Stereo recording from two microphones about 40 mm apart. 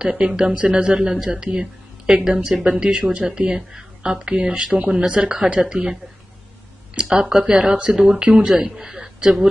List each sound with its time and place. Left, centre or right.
0.0 s speech: right
7.0 s speech: centre
8.2 s speech: right
8.5 s a man's voice: centre